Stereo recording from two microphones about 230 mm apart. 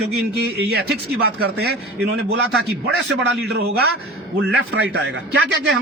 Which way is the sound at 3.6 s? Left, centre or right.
Right.